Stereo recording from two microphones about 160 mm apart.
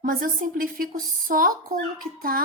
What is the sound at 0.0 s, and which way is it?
A woman's voice, 60° right (ahead or behind).